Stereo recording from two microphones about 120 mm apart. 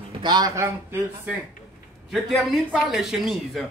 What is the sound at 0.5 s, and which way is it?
Speech, 20° right (ahead or behind).